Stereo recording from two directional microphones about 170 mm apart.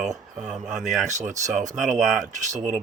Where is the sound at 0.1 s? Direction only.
45° right (ahead or behind).